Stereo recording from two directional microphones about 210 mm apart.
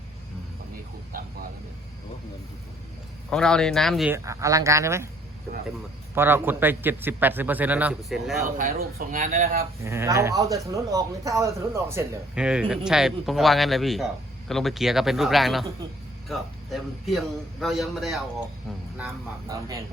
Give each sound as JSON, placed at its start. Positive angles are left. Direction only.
{"t": 3.2, "sound": "speech", "side_deg": 5}
{"t": 4.1, "sound": "a man's voice", "side_deg": -15}
{"t": 6.1, "sound": "a man's voice", "side_deg": -10}
{"t": 8.4, "sound": "speech", "side_deg": -40}
{"t": 9.8, "sound": "a man's voice", "side_deg": -15}
{"t": 18.9, "sound": "a man's voice", "side_deg": -15}